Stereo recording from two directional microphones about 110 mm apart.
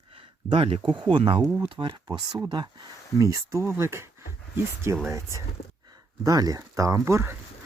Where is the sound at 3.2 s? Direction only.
30° right (ahead or behind).